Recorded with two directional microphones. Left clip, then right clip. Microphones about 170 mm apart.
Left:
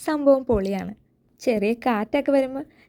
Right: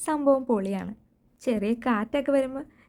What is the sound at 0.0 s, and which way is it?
A woman's voice, 15° left (ahead or behind).